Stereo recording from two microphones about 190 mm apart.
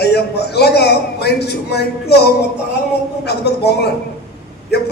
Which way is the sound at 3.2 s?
60° left (ahead or behind).